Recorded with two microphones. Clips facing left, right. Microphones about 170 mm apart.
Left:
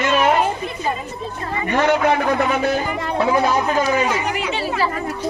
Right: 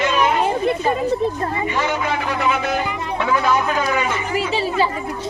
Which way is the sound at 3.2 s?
35° left (ahead or behind).